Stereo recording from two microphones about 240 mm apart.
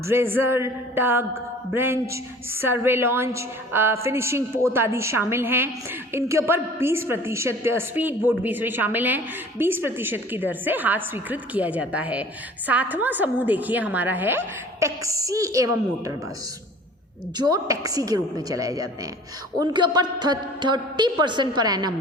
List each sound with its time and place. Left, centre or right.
0.1 s a woman's voice: centre
17.3 s a woman's voice: centre